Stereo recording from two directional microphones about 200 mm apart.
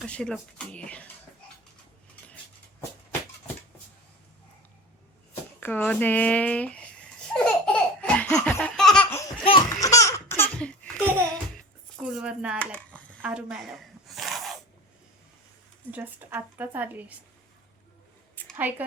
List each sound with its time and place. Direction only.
0.0 s speech: 5° left (ahead or behind)
5.3 s a sound: 10° left (ahead or behind)
9.4 s laughter: 25° left (ahead or behind)
9.6 s laughter: 15° left (ahead or behind)
11.5 s music: 5° right (ahead or behind)
12.5 s a sound: 5° left (ahead or behind)
13.2 s a sound: 5° right (ahead or behind)
15.9 s a woman's voice: 10° right (ahead or behind)
18.5 s a woman's voice: 10° right (ahead or behind)